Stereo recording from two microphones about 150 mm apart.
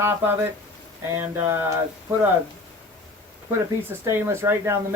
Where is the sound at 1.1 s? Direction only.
15° right (ahead or behind).